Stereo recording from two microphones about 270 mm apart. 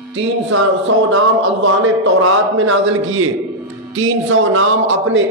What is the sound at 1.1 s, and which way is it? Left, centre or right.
A man's voice, right.